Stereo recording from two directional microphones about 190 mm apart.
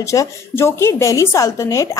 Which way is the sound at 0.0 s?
15° left (ahead or behind).